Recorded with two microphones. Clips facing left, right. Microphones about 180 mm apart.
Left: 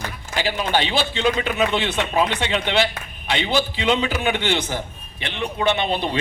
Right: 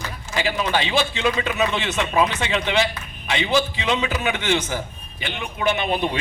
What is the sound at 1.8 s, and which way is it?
Speech, 30° left (ahead or behind).